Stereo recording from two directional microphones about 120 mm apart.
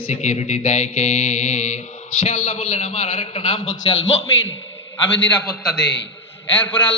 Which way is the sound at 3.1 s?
55° left (ahead or behind).